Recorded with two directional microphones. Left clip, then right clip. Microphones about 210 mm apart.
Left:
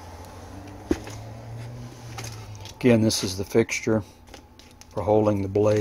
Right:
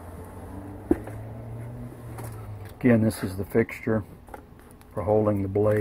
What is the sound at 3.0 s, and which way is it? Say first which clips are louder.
Speech: left 4 dB; 15° left (ahead or behind).